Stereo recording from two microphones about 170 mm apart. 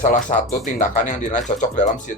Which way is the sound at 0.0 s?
50° left (ahead or behind).